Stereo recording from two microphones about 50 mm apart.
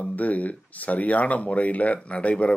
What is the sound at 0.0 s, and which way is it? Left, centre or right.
Speech, left.